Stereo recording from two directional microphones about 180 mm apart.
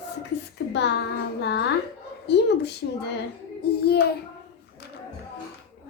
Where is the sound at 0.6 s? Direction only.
70° left (ahead or behind).